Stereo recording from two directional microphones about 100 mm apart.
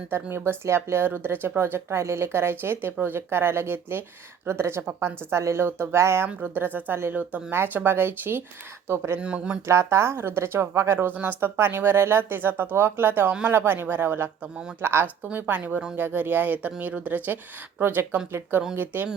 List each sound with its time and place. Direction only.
0.1 s speech: 25° right (ahead or behind)
9.2 s speech: 10° right (ahead or behind)
9.6 s speech: 25° right (ahead or behind)